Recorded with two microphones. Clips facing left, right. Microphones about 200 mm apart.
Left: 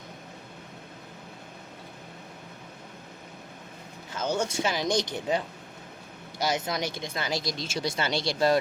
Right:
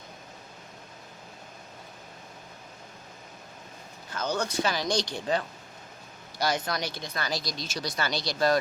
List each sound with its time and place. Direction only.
4.2 s speech: 25° left (ahead or behind)
6.4 s speech: 20° left (ahead or behind)